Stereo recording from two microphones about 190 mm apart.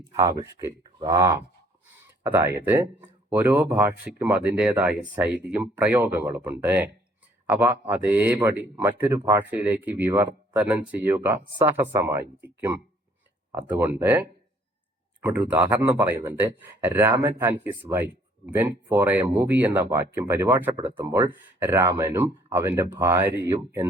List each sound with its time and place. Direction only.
0.2 s speech: 20° right (ahead or behind)